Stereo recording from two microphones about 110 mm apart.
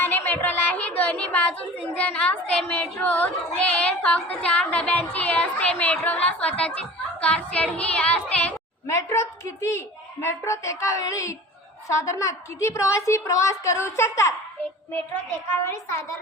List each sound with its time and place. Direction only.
0.0 s music: 20° left (ahead or behind)
2.0 s speech: 10° left (ahead or behind)
8.9 s a woman's voice: 25° left (ahead or behind)